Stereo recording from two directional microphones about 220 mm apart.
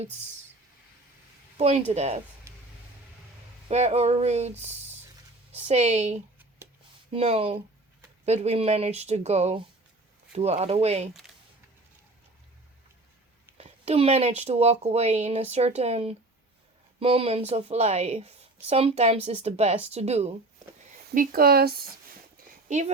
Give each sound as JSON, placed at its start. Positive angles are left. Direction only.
{"t": 1.5, "sound": "speech", "side_deg": -30}
{"t": 3.7, "sound": "speech", "side_deg": -30}
{"t": 13.6, "sound": "speech", "side_deg": -25}
{"t": 21.1, "sound": "speech", "side_deg": -45}